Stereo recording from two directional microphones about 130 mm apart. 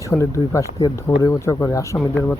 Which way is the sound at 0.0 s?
20° left (ahead or behind).